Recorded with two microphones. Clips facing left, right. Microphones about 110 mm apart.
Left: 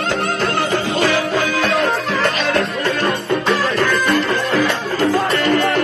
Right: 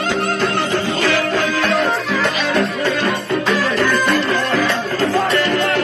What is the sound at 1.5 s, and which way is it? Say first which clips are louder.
Music: even; centre (ahead or behind).